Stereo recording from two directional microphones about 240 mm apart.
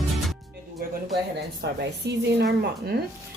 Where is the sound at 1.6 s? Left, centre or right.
Right.